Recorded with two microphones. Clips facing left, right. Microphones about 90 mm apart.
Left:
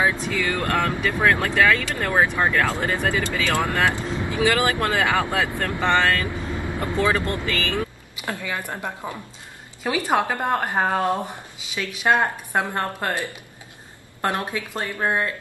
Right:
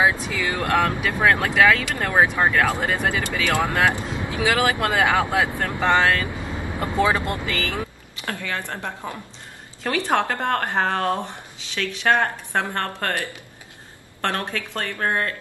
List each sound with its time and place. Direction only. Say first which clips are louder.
0.0 s speech: right 1 dB; 15° right (ahead or behind)
8.2 s speech: even; 10° left (ahead or behind)